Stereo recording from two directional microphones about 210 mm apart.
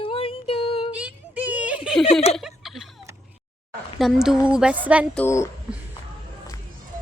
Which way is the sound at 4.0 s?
Centre (ahead or behind).